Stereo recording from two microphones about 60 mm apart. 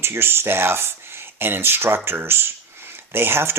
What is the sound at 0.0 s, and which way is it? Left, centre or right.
Speech, right.